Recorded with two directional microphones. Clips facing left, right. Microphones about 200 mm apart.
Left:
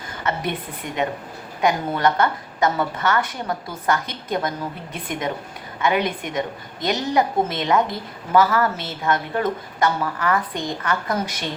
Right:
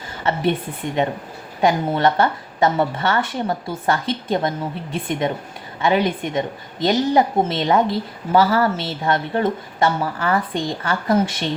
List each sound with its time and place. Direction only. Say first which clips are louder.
0.2 s a woman's voice: right 5 dB; 30° right (ahead or behind)
1.6 s a woman's voice: right 3 dB; 25° right (ahead or behind)